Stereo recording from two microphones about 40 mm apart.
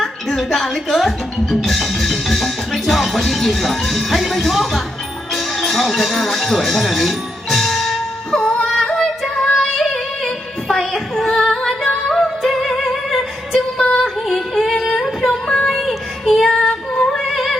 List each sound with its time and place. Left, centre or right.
0.0 s speech: centre
6.8 s music: centre
8.3 s music: centre
9.0 s female singing: centre
9.6 s music: centre
10.9 s female singing: centre
12.1 s music: centre
13.7 s singing: centre
15.3 s child singing: centre
16.5 s child singing: left
17.2 s music: centre